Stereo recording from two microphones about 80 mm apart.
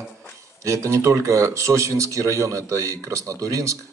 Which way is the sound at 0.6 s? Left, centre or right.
Right.